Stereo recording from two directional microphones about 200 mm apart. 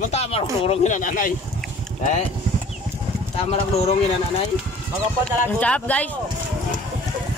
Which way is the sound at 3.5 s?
30° left (ahead or behind).